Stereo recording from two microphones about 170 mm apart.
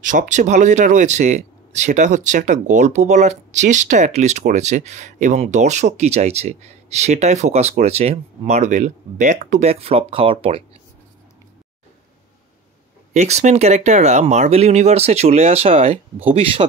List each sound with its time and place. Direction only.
0.0 s speech: 50° right (ahead or behind); by 10.6 s 35° right (ahead or behind)
13.1 s speech: 40° right (ahead or behind)